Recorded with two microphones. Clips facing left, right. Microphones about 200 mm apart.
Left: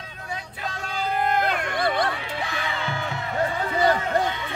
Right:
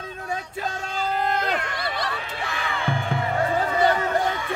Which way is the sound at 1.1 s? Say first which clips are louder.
Left 2 dB; 55° left (ahead or behind).